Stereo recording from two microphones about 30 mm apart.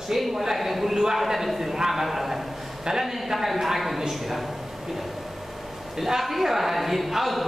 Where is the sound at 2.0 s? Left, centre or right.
Centre.